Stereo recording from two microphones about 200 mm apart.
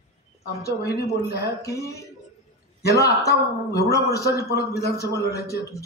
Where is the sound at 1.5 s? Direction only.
15° left (ahead or behind).